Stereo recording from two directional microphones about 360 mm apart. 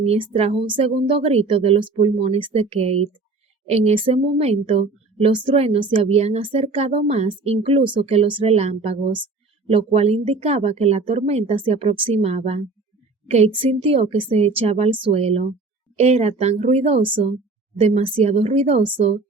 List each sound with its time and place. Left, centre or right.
0.0 s a woman's voice: centre